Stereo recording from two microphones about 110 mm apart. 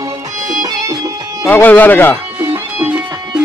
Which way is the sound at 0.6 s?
35° right (ahead or behind).